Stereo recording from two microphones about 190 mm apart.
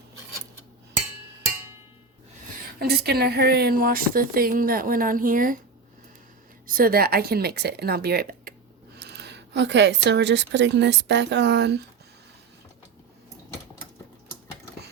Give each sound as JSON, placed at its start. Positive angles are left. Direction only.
{"t": 2.7, "sound": "speech", "side_deg": -55}
{"t": 6.7, "sound": "speech", "side_deg": -50}
{"t": 9.0, "sound": "a woman's voice", "side_deg": -60}